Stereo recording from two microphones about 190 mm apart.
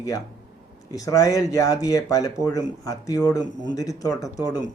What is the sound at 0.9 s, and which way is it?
Speech, 20° left (ahead or behind).